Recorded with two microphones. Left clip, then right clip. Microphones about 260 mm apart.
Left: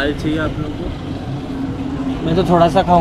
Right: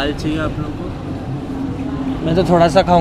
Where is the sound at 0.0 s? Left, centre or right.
Centre.